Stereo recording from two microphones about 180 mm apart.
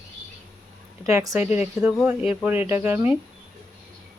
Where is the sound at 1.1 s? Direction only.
20° right (ahead or behind).